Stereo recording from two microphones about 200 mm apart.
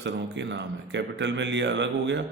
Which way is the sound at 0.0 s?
65° right (ahead or behind).